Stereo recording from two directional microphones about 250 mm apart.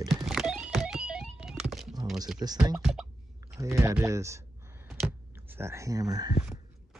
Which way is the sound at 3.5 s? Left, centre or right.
Centre.